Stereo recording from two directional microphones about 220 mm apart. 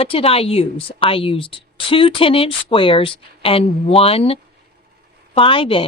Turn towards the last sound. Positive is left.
turn(degrees=25)  # may be behind; listen again after turning